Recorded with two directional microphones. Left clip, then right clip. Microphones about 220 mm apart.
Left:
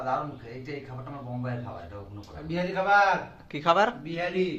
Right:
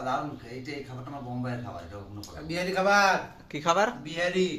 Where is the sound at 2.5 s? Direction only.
25° right (ahead or behind).